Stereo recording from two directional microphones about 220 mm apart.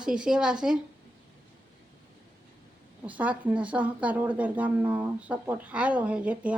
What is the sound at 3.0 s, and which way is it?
Speech, 5° right (ahead or behind).